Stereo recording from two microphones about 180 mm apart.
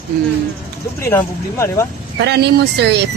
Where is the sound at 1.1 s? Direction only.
15° left (ahead or behind).